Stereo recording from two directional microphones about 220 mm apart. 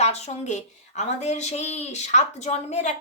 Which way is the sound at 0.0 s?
30° left (ahead or behind).